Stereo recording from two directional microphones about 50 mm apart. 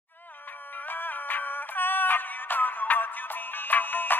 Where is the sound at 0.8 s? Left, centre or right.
Left.